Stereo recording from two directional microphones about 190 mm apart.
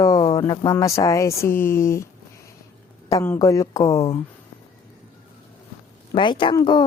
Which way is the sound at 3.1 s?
15° left (ahead or behind).